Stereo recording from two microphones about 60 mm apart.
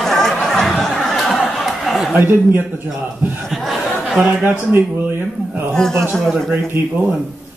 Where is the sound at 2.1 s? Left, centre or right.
Right.